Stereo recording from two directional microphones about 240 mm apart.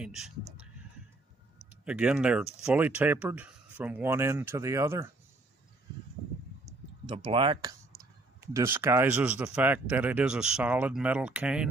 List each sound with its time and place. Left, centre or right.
0.0 s speech: centre
1.7 s speech: centre
7.1 s speech: right
8.5 s speech: centre